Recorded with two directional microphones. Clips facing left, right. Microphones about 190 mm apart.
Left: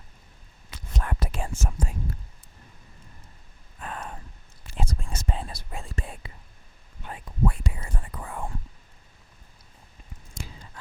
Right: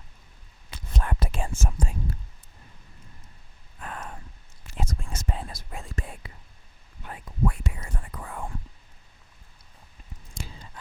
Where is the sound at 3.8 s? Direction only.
25° left (ahead or behind).